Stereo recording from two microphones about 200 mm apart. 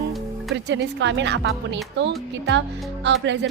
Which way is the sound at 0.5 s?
65° right (ahead or behind).